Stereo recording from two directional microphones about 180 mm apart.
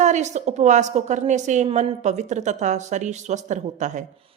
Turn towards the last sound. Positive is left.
turn(degrees=-40)  # may be behind; listen again after turning